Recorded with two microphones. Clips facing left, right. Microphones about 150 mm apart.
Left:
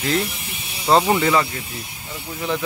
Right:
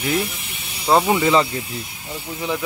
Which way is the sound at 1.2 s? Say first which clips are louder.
Right 2 dB; 20° right (ahead or behind).